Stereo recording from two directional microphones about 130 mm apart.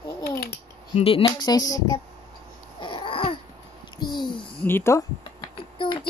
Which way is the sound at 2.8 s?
40° left (ahead or behind).